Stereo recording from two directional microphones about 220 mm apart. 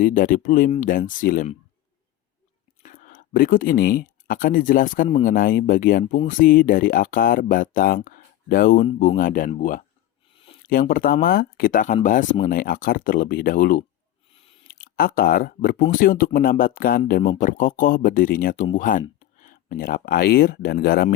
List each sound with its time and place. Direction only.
0.0 s speech: 40° left (ahead or behind)
2.8 s speech: 35° left (ahead or behind)
10.3 s a sound: 25° left (ahead or behind)
10.7 s speech: 40° left (ahead or behind)